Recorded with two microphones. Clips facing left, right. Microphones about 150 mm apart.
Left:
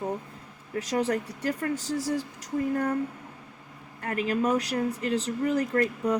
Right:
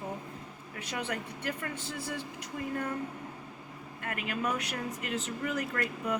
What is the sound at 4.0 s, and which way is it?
Speech, 35° left (ahead or behind).